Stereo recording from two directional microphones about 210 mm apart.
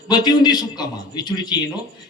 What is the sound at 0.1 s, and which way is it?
A man's voice, 20° left (ahead or behind).